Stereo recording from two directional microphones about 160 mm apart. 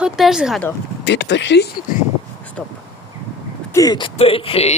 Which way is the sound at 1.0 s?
90° left.